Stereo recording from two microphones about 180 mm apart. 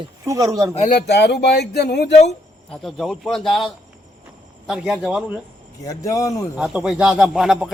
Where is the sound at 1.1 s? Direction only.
70° left (ahead or behind).